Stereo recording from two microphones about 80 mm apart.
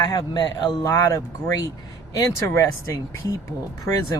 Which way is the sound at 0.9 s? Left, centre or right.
Left.